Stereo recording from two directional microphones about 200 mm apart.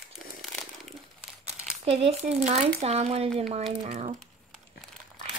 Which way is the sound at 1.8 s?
30° right (ahead or behind).